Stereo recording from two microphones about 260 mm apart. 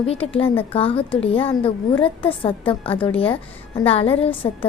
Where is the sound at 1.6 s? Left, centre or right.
Centre.